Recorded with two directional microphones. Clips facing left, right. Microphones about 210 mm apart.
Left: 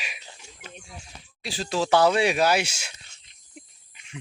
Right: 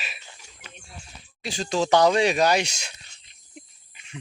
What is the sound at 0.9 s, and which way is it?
Speech, centre (ahead or behind).